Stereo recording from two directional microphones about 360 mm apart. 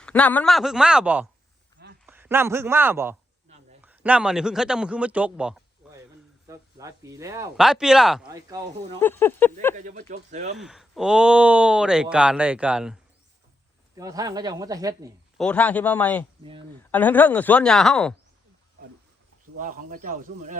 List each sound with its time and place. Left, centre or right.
0.0 s a man's voice: centre
5.8 s a sound: centre
6.5 s speech: centre
9.0 s speech: centre
9.7 s speech: centre
10.6 s speech: centre
15.4 s speech: centre
16.4 s speech: centre
16.9 s speech: centre
19.5 s speech: right